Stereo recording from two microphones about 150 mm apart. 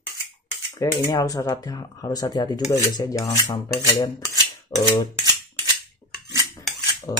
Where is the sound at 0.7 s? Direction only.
20° left (ahead or behind).